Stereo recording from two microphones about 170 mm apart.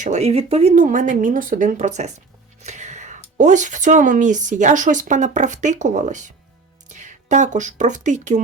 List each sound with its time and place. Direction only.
0.0 s speech: 40° right (ahead or behind)